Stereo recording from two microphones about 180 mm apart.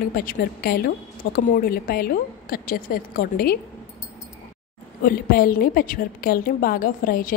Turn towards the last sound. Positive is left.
turn(degrees=50)  # may be behind; listen again after turning